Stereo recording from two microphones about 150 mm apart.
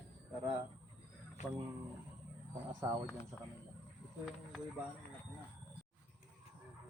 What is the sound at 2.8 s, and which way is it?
Speech, 25° right (ahead or behind).